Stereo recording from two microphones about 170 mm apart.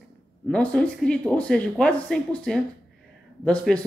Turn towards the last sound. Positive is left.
turn(degrees=5)  # may be behind; listen again after turning